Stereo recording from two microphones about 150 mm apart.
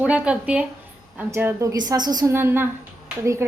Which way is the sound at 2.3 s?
15° right (ahead or behind).